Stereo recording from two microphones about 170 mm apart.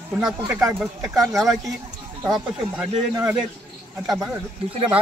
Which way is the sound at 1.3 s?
Centre (ahead or behind).